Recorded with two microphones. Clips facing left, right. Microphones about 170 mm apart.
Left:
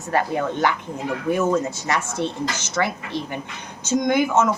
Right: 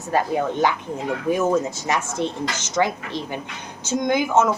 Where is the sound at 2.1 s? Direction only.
15° right (ahead or behind).